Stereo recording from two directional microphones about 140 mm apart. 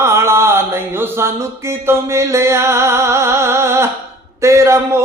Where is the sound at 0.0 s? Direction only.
20° right (ahead or behind).